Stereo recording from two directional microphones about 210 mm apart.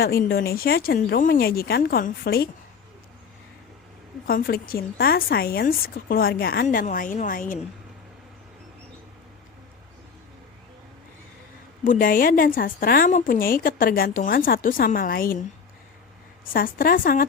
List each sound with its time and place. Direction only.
0.0 s a woman's voice: 45° left (ahead or behind)
4.3 s a woman's voice: 45° left (ahead or behind)
11.9 s a woman's voice: 40° left (ahead or behind)